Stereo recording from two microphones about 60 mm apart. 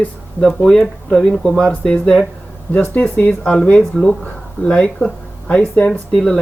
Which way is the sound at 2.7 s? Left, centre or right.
Left.